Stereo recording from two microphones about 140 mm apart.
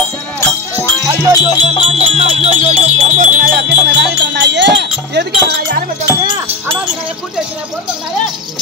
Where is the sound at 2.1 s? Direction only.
50° right (ahead or behind).